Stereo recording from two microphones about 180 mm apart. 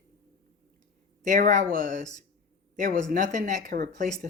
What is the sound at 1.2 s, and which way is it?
Speech, 45° right (ahead or behind).